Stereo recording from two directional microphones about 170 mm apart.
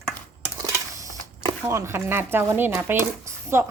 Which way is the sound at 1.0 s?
20° right (ahead or behind).